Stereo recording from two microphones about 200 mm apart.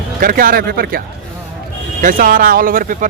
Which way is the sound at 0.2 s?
45° right (ahead or behind).